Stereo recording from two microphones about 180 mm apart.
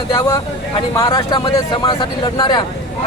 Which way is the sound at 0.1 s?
20° left (ahead or behind).